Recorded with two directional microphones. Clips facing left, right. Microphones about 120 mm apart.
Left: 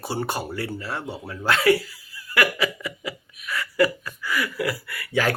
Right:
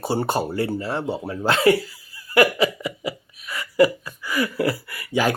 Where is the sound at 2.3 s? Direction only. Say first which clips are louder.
Right 6 dB; 25° right (ahead or behind).